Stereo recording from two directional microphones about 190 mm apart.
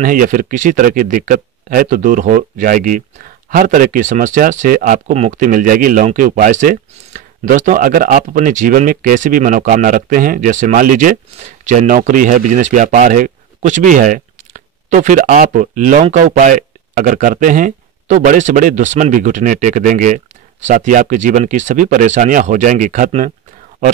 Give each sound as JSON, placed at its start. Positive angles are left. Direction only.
{"t": 0.0, "sound": "speech", "side_deg": -45}